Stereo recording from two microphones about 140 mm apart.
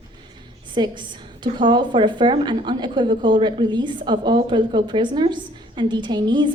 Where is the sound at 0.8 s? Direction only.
30° right (ahead or behind).